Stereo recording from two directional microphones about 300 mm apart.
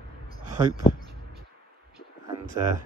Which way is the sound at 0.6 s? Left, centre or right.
Centre.